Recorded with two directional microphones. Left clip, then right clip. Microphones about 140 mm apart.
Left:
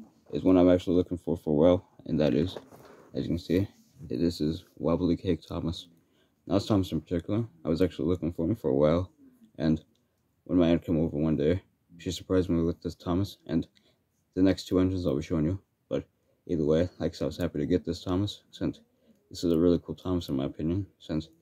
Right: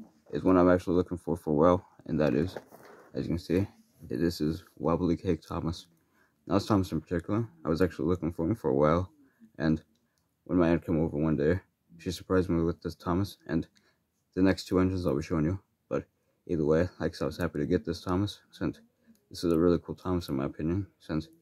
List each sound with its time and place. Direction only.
0.3 s speech: 20° left (ahead or behind)